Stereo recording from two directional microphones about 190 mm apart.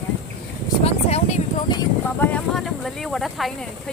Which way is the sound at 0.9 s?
30° left (ahead or behind).